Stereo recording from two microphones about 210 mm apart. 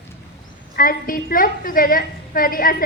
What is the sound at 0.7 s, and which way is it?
A woman's voice, 45° left (ahead or behind).